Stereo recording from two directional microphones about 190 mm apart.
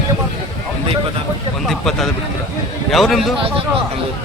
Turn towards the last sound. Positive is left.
turn(degrees=0)  # may be behind; listen again after turning